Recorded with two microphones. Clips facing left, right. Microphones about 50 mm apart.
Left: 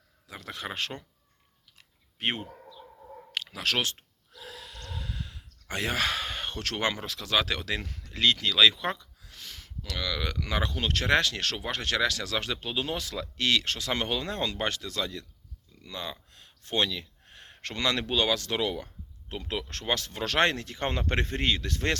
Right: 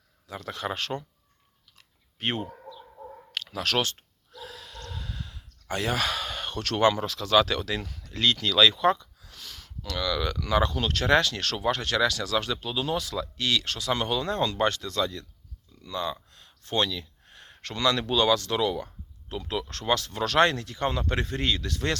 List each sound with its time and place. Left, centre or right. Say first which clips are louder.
0.3 s speech: right 5 dB; centre
2.1 s speech: right 1 dB; left
4.4 s a sound: right 1 dB; centre
9.9 s speech: right 4 dB; centre
10.4 s speech: right 6 dB; left
15.8 s a sound: right 6 dB; centre
18.1 s speech: right 4 dB; centre